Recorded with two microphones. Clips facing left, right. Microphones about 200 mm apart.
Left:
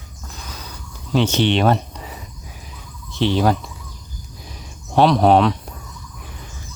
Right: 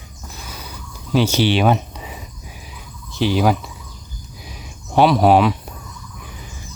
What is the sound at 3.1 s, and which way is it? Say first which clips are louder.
Speech: even; 5° right (ahead or behind).